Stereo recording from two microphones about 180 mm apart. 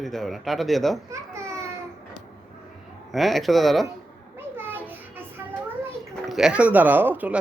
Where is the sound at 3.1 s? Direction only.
Centre (ahead or behind).